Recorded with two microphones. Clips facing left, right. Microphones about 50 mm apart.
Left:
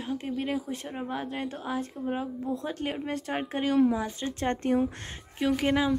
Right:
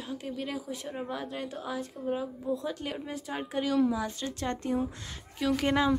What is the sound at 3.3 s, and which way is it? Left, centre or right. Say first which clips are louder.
Speech: left 2 dB; left.